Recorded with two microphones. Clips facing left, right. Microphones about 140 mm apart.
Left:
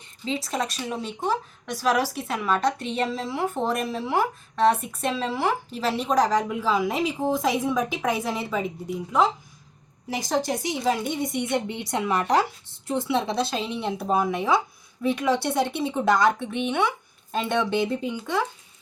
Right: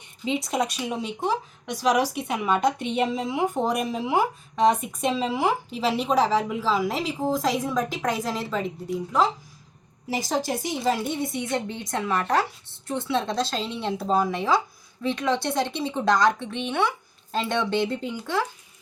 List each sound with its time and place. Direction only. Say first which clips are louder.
0.3 s a woman's voice: right 3 dB; 15° right (ahead or behind)
6.9 s a woman's voice: left 1 dB; 15° left (ahead or behind)
7.4 s a woman's voice: left 1 dB; 5° left (ahead or behind)
11.4 s a woman's voice: left 2 dB; 20° left (ahead or behind); by 18.4 s centre (ahead or behind)